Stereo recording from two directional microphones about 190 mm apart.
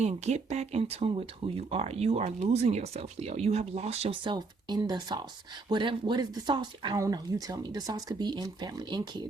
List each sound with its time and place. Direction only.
0.0 s speech: 35° right (ahead or behind)